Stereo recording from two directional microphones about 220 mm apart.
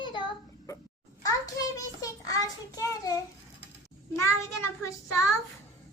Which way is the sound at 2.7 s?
15° left (ahead or behind).